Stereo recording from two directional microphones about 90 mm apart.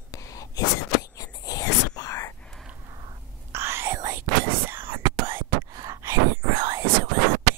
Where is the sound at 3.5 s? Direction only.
30° right (ahead or behind).